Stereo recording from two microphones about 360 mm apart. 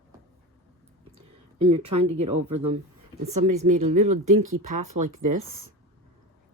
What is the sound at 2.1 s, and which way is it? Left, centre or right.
Speech, centre.